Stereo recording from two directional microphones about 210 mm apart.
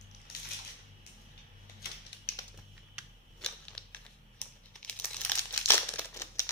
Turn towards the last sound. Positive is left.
turn(degrees=15)  # may be behind; listen again after turning